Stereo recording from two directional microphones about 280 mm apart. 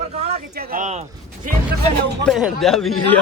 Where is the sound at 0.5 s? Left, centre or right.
Right.